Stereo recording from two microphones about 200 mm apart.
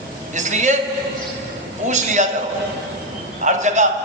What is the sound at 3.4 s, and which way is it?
Speech, 35° right (ahead or behind).